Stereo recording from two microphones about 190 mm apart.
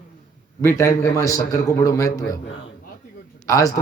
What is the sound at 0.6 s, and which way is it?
Speech, 15° left (ahead or behind).